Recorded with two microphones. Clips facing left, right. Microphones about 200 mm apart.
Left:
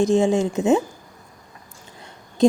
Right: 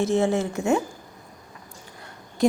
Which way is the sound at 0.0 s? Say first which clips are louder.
Left 4 dB; 15° left (ahead or behind).